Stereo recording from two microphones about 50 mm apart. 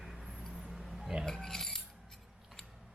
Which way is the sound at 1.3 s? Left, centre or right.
Centre.